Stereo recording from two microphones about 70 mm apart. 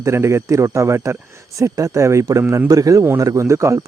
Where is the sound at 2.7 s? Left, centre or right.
Right.